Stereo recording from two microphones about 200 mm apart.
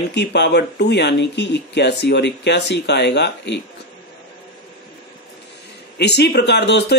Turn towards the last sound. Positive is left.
turn(degrees=60)  # may be behind; listen again after turning